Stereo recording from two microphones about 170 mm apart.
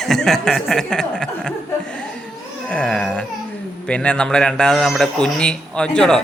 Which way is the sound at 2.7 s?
5° left (ahead or behind).